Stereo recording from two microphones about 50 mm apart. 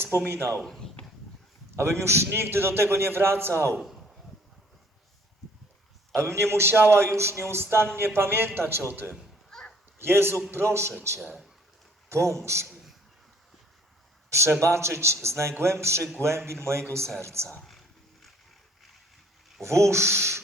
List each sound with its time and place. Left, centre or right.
0.1 s speech: right
1.7 s a man's voice: right
3.7 s a man's voice: centre
6.1 s a man's voice: right
7.2 s speech: right
7.6 s a man's voice: right
10.0 s a man's voice: right
12.0 s a man's voice: right
14.3 s a man's voice: right
17.6 s wild animals: centre
19.6 s speech: right